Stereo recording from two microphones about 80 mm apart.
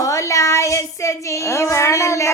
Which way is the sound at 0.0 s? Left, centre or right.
Left.